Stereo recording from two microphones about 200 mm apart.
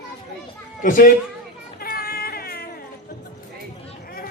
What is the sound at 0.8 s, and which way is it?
Speech, 45° left (ahead or behind).